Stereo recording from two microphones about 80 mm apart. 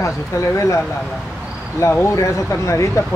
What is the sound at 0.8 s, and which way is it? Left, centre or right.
Speech, centre.